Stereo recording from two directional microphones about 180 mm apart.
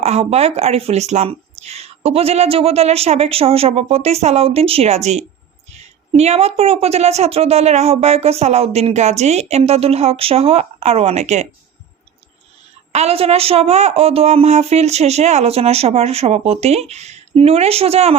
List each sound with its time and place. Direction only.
0.0 s a woman's voice: 35° right (ahead or behind)
12.9 s a woman's voice: 35° right (ahead or behind)